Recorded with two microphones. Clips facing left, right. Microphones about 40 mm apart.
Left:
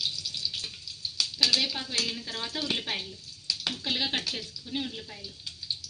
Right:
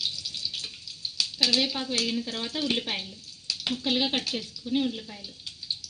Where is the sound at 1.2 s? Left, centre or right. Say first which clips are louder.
Right 1 dB; right.